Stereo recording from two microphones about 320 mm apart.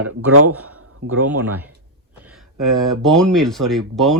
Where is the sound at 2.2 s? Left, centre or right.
Centre.